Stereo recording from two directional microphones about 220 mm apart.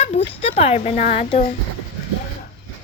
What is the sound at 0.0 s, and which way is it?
Speech, 30° left (ahead or behind).